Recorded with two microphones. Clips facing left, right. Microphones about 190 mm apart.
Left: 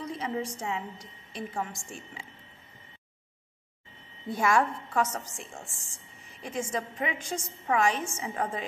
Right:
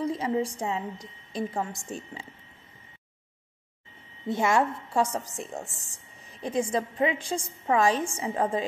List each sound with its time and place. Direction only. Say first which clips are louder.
0.0 s a woman's voice: right 6 dB; 35° right (ahead or behind)
4.3 s a woman's voice: right 2 dB; 25° right (ahead or behind)
5.1 s a woman's voice: right 6 dB; 35° right (ahead or behind)